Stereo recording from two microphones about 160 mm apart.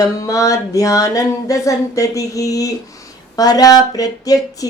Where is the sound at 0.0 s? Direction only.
20° left (ahead or behind).